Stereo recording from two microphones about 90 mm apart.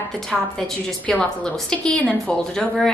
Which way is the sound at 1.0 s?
10° left (ahead or behind).